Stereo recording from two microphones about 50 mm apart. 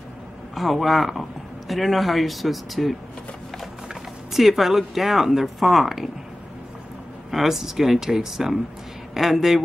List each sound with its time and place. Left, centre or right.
0.6 s speech: centre
7.2 s speech: centre